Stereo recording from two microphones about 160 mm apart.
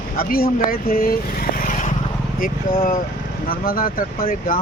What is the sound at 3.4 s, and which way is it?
Speech, 65° left (ahead or behind).